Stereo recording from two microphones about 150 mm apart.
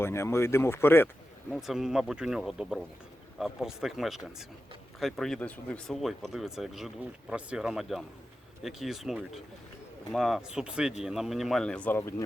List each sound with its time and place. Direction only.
0.0 s speech: 15° left (ahead or behind)
1.5 s speech: centre (ahead or behind)